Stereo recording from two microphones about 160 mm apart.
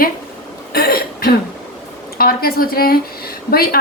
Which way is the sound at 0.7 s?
70° left (ahead or behind).